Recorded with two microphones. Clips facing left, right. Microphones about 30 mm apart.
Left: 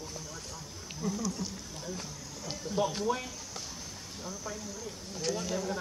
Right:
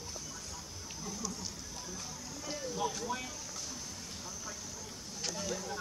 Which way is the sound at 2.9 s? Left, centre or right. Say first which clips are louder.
Left 6 dB; left.